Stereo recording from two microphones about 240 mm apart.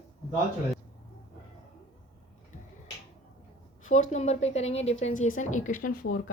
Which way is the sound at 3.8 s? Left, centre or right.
Left.